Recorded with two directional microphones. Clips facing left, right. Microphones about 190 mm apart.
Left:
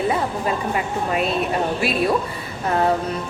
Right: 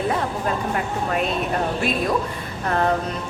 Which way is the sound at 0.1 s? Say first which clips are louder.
Left 1 dB; 5° left (ahead or behind).